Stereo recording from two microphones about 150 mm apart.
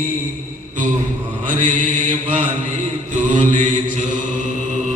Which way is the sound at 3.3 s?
55° right (ahead or behind).